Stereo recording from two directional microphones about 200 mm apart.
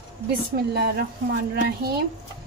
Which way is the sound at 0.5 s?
50° right (ahead or behind).